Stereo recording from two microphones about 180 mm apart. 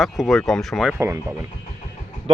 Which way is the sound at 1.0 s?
15° right (ahead or behind).